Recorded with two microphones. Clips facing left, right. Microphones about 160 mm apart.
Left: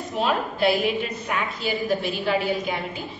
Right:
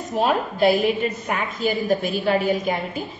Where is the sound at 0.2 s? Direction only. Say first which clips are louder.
Right 3 dB; 45° right (ahead or behind).